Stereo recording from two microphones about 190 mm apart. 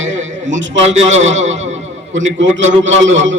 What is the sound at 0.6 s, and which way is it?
Speech, 75° right (ahead or behind).